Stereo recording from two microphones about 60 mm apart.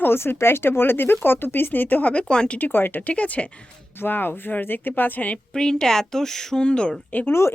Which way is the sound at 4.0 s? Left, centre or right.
Left.